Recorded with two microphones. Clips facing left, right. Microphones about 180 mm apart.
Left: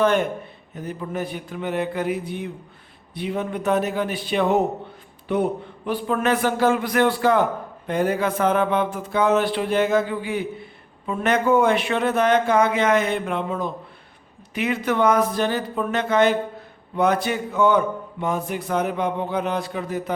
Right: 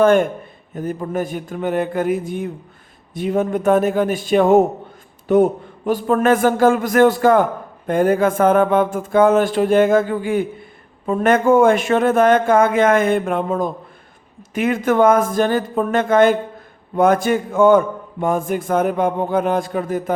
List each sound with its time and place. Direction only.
0.0 s a man's voice: 50° right (ahead or behind)